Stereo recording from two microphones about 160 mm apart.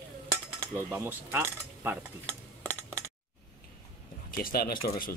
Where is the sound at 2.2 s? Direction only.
10° left (ahead or behind).